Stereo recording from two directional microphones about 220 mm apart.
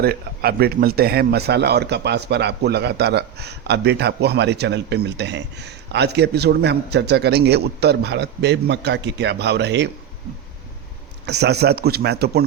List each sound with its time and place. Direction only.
0.0 s speech: 45° right (ahead or behind)
11.3 s speech: 50° right (ahead or behind)